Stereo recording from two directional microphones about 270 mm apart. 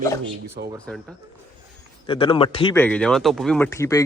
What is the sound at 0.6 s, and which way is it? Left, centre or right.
Speech, right.